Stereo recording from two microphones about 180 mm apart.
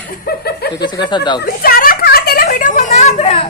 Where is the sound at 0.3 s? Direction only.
60° left (ahead or behind).